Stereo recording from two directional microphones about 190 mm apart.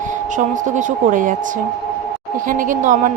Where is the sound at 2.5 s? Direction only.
45° right (ahead or behind).